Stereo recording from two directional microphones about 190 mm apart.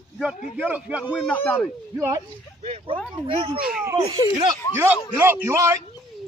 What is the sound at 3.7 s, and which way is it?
Speech, 15° right (ahead or behind).